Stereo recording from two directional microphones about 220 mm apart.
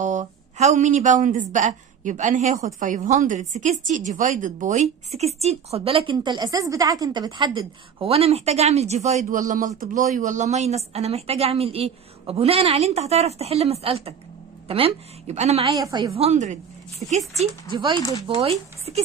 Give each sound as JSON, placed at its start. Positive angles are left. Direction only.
{"t": 0.0, "sound": "a woman's voice", "side_deg": -35}
{"t": 15.7, "sound": "a woman's voice", "side_deg": -20}
{"t": 17.7, "sound": "a woman's voice", "side_deg": -20}